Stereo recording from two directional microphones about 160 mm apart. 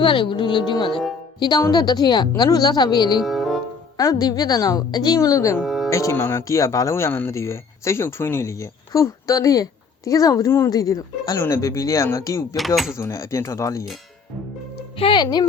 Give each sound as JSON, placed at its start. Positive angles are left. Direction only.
{"t": 0.0, "sound": "speech", "side_deg": 30}
{"t": 3.2, "sound": "music", "side_deg": 0}
{"t": 3.9, "sound": "speech", "side_deg": 25}
{"t": 5.6, "sound": "music", "side_deg": 0}
{"t": 5.9, "sound": "speech", "side_deg": 20}
{"t": 12.5, "sound": "speech", "side_deg": 0}
{"t": 13.0, "sound": "speech", "side_deg": 15}
{"t": 14.9, "sound": "speech", "side_deg": 30}